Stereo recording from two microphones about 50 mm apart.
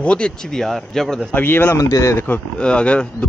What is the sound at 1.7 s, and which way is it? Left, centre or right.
Speech, left.